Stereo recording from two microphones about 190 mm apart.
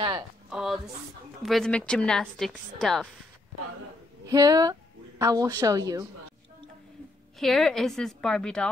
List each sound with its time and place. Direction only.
0.5 s a sound: centre (ahead or behind)
1.4 s a woman's voice: centre (ahead or behind)
4.3 s a woman's voice: 20° right (ahead or behind)
7.3 s a woman's voice: centre (ahead or behind)